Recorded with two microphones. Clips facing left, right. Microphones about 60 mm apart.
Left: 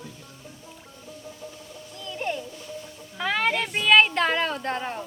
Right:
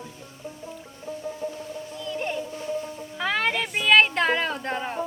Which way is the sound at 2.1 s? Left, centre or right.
Centre.